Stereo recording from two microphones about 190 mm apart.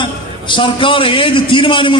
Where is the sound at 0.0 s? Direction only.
25° left (ahead or behind).